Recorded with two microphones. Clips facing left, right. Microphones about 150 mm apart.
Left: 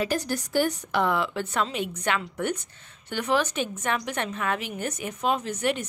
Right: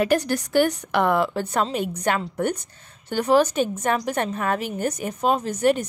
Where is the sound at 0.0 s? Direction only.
65° right (ahead or behind).